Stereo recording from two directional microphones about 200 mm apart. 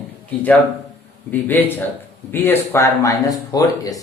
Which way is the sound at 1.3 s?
10° left (ahead or behind).